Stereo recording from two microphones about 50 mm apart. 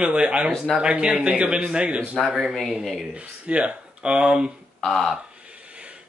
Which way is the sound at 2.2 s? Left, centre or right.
Centre.